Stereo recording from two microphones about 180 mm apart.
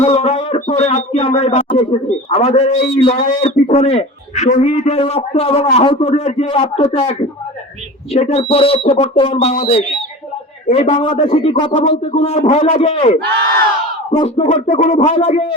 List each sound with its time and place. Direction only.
0.0 s a sound: 35° left (ahead or behind)
2.3 s speech: 35° left (ahead or behind)
14.2 s speech: 35° left (ahead or behind)